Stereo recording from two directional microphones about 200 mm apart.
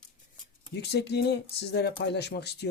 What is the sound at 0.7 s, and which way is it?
Speech, 55° left (ahead or behind).